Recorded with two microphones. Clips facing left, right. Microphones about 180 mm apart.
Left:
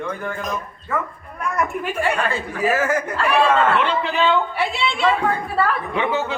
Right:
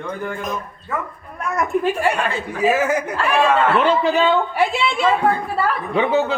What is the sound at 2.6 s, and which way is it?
Speech, 15° right (ahead or behind).